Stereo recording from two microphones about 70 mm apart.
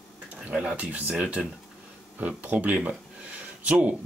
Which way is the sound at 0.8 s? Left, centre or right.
Centre.